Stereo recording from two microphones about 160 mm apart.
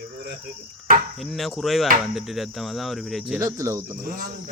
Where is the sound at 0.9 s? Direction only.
65° right (ahead or behind).